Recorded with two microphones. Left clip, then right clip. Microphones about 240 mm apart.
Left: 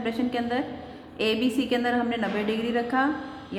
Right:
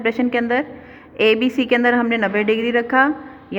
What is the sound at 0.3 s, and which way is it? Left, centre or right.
A man's voice, right.